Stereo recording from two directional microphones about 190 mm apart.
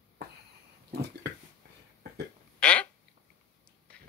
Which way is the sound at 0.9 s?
60° right (ahead or behind).